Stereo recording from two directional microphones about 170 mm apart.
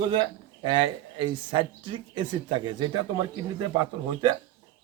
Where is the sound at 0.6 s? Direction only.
30° right (ahead or behind).